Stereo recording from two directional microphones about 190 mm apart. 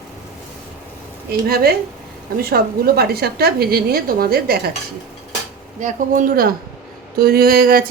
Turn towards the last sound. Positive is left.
turn(degrees=-50)  # may be behind; listen again after turning